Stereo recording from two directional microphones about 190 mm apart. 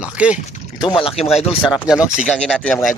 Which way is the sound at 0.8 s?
25° left (ahead or behind).